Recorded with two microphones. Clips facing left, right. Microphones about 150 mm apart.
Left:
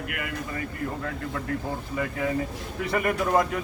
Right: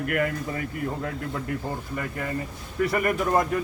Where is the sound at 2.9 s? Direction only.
Centre (ahead or behind).